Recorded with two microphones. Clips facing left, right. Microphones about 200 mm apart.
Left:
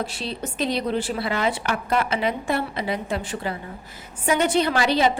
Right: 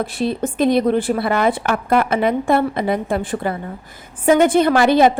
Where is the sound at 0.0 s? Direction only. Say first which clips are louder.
Right 9 dB; 55° right (ahead or behind).